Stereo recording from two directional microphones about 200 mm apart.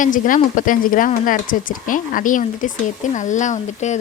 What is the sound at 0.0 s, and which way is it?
Speech, 40° left (ahead or behind).